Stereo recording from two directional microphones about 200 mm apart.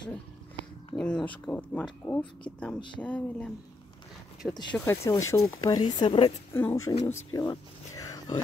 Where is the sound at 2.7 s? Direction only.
25° left (ahead or behind).